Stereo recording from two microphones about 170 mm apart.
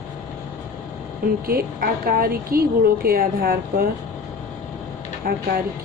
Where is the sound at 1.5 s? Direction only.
60° right (ahead or behind).